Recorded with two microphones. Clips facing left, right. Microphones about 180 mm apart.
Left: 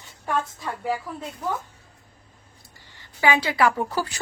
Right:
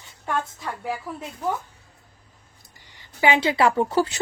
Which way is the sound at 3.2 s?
25° right (ahead or behind).